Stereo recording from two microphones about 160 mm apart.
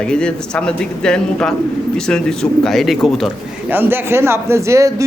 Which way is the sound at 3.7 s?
15° right (ahead or behind).